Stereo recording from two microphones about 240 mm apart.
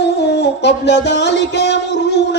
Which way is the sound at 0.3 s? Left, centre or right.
Left.